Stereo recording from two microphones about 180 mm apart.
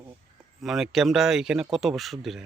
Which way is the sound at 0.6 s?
Centre (ahead or behind).